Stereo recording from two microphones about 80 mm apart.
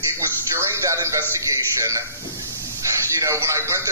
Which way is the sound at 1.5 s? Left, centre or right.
Right.